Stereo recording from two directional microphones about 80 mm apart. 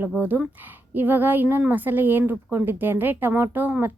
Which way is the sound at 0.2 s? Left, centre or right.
Right.